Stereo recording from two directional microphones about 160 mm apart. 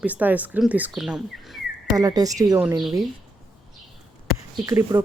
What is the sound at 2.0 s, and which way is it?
Speech, 25° right (ahead or behind).